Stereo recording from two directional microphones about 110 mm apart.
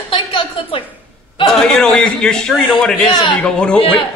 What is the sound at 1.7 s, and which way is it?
Speech, 5° left (ahead or behind).